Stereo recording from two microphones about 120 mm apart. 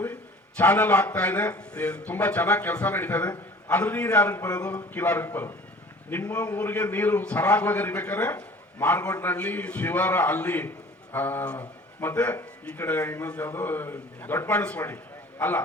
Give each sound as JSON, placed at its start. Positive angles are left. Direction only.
{"t": 0.0, "sound": "a man's voice", "side_deg": 15}